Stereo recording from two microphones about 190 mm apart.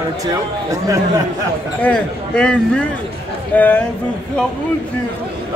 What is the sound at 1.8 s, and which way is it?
A man's voice, 5° left (ahead or behind).